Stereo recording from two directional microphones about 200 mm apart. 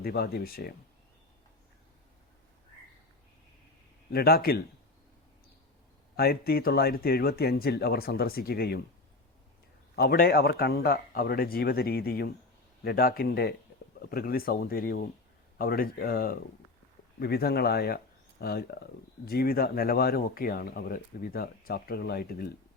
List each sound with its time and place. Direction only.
0.0 s speech: 50° left (ahead or behind)
4.1 s speech: 50° left (ahead or behind)
6.1 s speech: 50° left (ahead or behind)
9.9 s speech: 50° left (ahead or behind)